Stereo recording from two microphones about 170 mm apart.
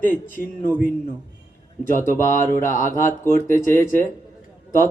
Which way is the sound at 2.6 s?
50° left (ahead or behind).